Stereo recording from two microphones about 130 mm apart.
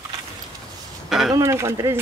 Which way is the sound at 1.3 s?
20° right (ahead or behind).